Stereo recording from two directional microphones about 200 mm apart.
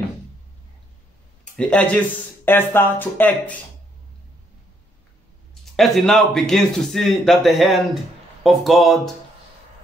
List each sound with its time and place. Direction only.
1.4 s speech: 5° left (ahead or behind)
5.5 s a man's voice: centre (ahead or behind)